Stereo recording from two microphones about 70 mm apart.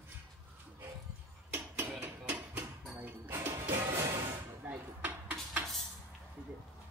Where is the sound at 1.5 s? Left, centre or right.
Right.